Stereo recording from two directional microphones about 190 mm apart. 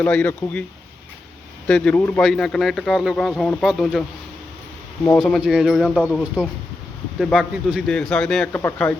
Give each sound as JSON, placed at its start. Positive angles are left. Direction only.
{"t": 0.0, "sound": "speech", "side_deg": 10}
{"t": 1.6, "sound": "speech", "side_deg": 5}
{"t": 5.1, "sound": "speech", "side_deg": 0}